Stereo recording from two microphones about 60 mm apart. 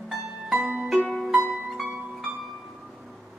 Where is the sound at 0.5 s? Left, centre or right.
Right.